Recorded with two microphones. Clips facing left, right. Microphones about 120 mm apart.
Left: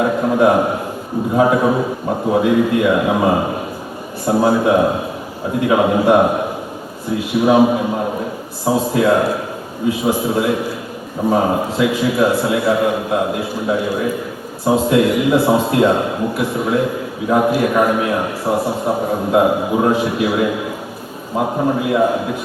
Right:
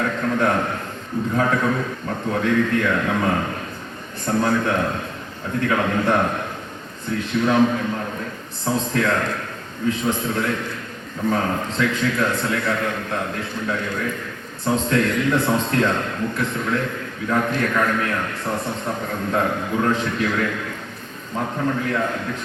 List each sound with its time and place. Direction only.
0.0 s a man's voice: 15° left (ahead or behind)